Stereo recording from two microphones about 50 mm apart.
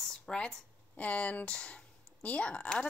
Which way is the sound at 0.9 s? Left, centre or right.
Left.